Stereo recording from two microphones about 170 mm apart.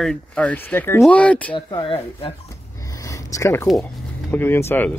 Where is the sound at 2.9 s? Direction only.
20° left (ahead or behind).